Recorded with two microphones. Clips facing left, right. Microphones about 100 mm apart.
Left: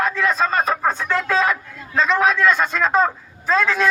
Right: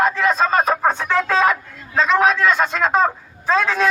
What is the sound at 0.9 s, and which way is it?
Music, centre (ahead or behind).